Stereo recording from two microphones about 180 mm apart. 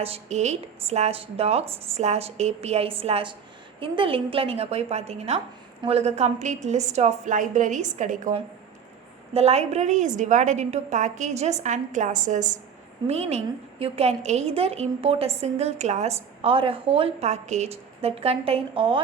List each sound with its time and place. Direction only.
0.0 s a woman's voice: 35° right (ahead or behind)